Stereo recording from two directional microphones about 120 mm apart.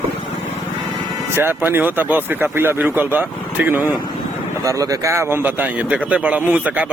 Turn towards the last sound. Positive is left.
turn(degrees=-15)  # may be behind; listen again after turning